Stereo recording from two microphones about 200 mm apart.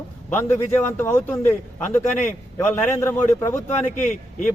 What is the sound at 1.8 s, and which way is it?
Speech, 40° left (ahead or behind).